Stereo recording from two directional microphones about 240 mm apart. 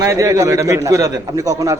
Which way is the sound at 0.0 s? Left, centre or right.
Centre.